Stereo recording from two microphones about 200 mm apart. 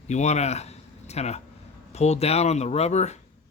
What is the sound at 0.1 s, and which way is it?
Speech, 35° left (ahead or behind).